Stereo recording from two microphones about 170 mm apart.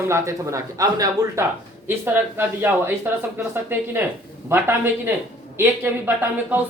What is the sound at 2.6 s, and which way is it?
Speech, 15° right (ahead or behind).